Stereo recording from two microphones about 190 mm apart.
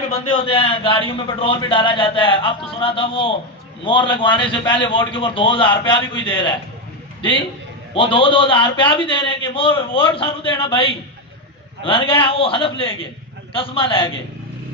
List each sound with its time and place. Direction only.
0.3 s a man's voice: 30° left (ahead or behind)